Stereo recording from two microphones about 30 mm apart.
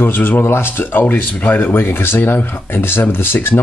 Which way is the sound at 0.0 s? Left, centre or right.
Left.